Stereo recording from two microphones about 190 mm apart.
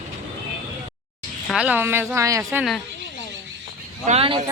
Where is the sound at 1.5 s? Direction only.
5° right (ahead or behind).